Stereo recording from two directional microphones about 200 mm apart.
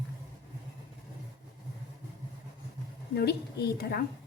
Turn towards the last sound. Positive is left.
turn(degrees=50)  # may be behind; listen again after turning